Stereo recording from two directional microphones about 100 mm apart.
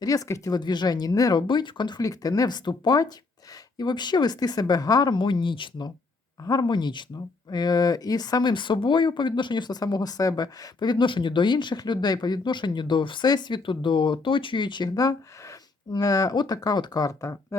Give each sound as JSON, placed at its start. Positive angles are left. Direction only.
{"t": 0.0, "sound": "speech", "side_deg": 35}
{"t": 0.6, "sound": "speech", "side_deg": 45}
{"t": 6.4, "sound": "speech", "side_deg": 40}